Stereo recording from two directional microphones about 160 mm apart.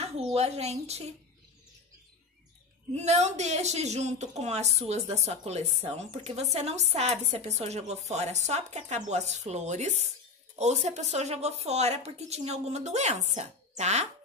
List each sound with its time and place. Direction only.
0.0 s speech: 40° right (ahead or behind)
2.9 s a woman's voice: 45° right (ahead or behind)